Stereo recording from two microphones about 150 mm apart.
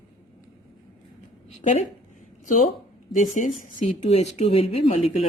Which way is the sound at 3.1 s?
60° left (ahead or behind).